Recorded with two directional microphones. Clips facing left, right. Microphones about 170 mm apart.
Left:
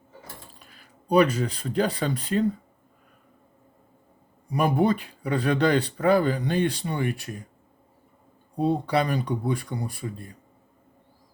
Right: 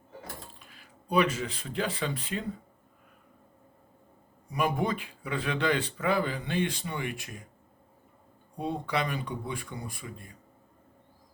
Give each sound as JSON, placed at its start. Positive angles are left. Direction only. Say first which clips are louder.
{"t": 0.6, "sound": "speech", "louder": "left 2 dB", "side_deg": 40}
{"t": 4.5, "sound": "speech", "louder": "left 7 dB", "side_deg": 35}
{"t": 8.5, "sound": "speech", "louder": "left 8 dB", "side_deg": 35}